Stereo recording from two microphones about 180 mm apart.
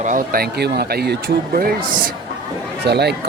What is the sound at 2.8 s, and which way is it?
Speech, 65° right (ahead or behind).